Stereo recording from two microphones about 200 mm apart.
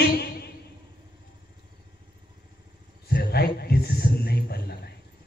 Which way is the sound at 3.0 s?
55° left (ahead or behind).